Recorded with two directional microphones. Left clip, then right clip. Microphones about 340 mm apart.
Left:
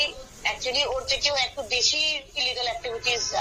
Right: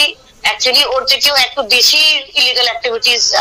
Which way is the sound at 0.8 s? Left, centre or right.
Right.